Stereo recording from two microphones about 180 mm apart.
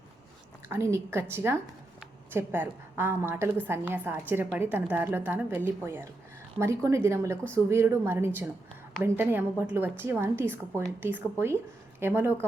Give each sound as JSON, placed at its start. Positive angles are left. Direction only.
{"t": 0.7, "sound": "a woman's voice", "side_deg": -15}